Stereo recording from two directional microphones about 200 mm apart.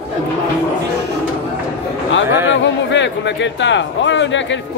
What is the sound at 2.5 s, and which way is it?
Speech, 65° left (ahead or behind).